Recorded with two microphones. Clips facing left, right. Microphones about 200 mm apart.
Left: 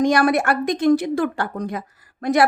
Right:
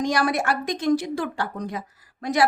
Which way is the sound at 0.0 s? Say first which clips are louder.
Left 6 dB; 55° left (ahead or behind).